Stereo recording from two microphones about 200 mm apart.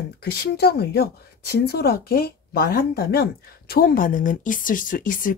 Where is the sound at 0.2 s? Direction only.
50° left (ahead or behind).